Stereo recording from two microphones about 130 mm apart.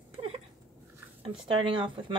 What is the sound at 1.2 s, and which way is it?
Speech, 40° right (ahead or behind).